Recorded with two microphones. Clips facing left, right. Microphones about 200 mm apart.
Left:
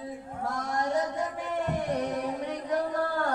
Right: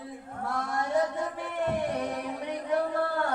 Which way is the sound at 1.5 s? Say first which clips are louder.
Even; 45° left (ahead or behind).